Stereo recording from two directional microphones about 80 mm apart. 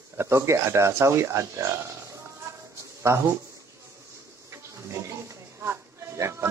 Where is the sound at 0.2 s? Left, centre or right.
Right.